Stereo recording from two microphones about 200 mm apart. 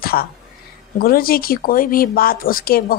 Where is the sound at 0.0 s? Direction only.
50° left (ahead or behind).